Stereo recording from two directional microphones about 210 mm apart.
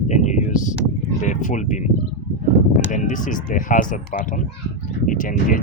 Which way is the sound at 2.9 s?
35° left (ahead or behind).